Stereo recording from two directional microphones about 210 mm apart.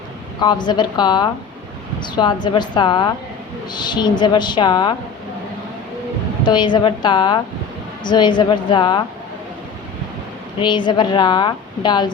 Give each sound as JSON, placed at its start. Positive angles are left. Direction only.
{"t": 0.3, "sound": "a woman's voice", "side_deg": 20}
{"t": 6.4, "sound": "a woman's voice", "side_deg": 20}
{"t": 10.6, "sound": "a woman's voice", "side_deg": 20}